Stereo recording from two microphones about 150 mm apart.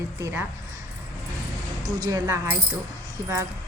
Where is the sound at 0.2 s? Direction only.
20° right (ahead or behind).